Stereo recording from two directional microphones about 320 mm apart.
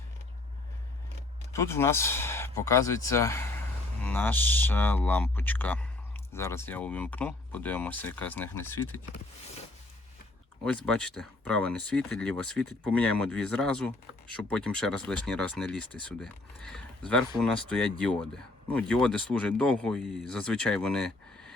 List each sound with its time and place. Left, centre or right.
1.5 s speech: centre
10.7 s speech: centre